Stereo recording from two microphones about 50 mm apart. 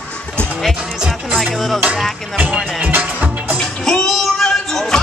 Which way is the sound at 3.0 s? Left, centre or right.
Right.